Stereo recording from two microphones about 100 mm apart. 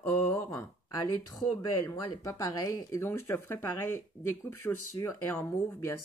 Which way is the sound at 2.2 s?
35° left (ahead or behind).